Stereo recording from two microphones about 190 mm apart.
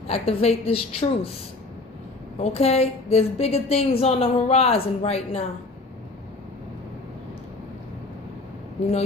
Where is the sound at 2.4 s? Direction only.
35° left (ahead or behind).